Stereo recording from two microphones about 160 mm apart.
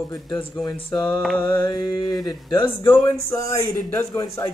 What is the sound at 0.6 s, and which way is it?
Speech, 20° left (ahead or behind).